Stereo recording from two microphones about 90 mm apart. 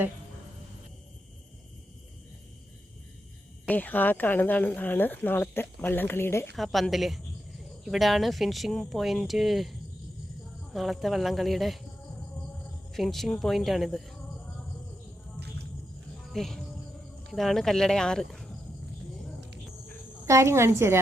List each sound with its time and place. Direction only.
3.7 s speech: 20° left (ahead or behind)
6.6 s speech: centre (ahead or behind)
12.9 s speech: 5° left (ahead or behind)
16.1 s music: centre (ahead or behind)
17.2 s speech: 5° left (ahead or behind)
20.2 s a woman's voice: 35° right (ahead or behind)